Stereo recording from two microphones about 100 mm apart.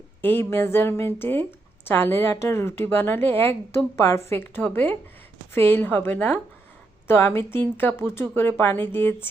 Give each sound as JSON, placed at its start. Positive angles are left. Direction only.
{"t": 0.2, "sound": "a woman's voice", "side_deg": 20}